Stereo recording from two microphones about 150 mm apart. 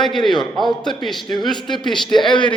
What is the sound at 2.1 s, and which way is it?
Speech, 30° left (ahead or behind).